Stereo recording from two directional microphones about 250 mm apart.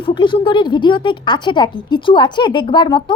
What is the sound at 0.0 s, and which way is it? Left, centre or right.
A woman's voice, centre.